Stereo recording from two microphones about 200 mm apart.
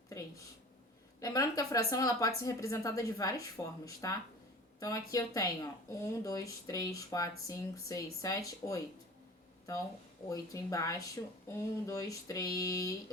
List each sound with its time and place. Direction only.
1.2 s speech: 15° left (ahead or behind)